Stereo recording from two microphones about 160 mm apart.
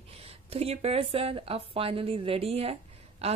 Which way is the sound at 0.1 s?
40° right (ahead or behind).